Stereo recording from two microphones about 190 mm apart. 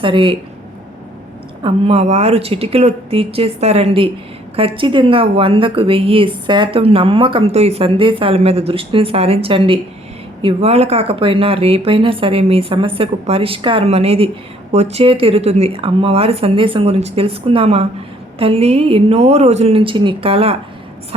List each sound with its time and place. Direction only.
0.0 s a woman's voice: 25° right (ahead or behind)
1.6 s a woman's voice: 30° right (ahead or behind)